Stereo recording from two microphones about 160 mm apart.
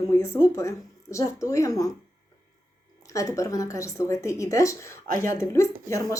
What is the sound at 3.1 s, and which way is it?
Speech, 20° left (ahead or behind).